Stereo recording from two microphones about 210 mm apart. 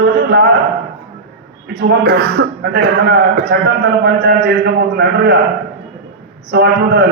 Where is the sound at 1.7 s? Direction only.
50° right (ahead or behind).